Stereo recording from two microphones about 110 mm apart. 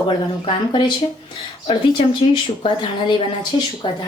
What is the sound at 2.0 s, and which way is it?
Speech, 50° left (ahead or behind).